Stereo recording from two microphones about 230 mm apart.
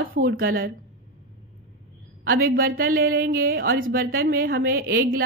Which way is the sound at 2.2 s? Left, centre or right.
Right.